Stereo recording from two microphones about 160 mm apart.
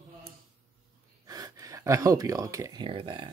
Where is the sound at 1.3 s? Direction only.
20° right (ahead or behind).